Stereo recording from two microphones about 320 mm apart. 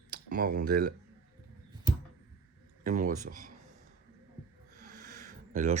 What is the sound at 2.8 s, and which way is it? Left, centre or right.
Speech, right.